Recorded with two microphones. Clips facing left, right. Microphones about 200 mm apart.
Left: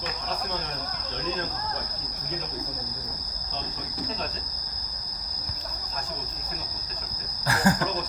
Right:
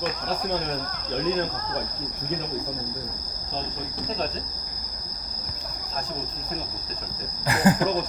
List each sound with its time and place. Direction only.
7.4 s cricket: 20° right (ahead or behind)